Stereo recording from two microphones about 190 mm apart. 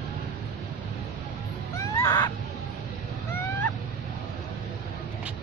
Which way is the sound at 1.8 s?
15° left (ahead or behind).